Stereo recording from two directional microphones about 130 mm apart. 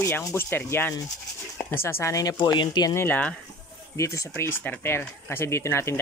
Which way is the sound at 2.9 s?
15° left (ahead or behind).